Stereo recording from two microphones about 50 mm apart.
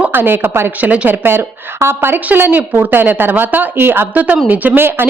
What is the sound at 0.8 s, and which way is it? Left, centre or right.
Speech, right.